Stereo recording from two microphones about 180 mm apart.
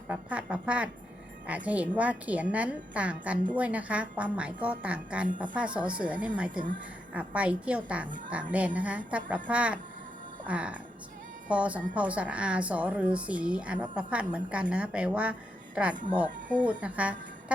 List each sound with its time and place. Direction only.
0.1 s a woman's voice: 5° right (ahead or behind)